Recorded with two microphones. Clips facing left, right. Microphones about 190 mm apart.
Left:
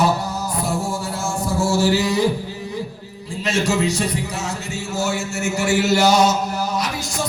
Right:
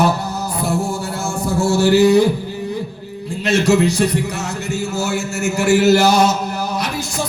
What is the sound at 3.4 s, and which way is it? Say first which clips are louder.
Speech: right 5 dB; 65° right (ahead or behind).